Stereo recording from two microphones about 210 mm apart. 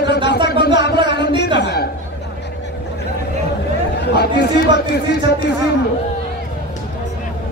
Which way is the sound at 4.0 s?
50° left (ahead or behind).